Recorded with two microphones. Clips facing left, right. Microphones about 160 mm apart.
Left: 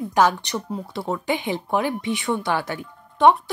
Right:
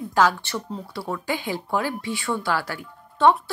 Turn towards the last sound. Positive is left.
turn(degrees=20)  # may be behind; listen again after turning